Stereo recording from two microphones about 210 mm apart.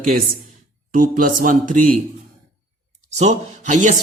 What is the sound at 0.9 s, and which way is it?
A man's voice, 40° right (ahead or behind).